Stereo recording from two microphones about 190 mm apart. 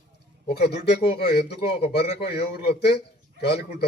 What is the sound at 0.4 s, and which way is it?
Speech, 55° left (ahead or behind).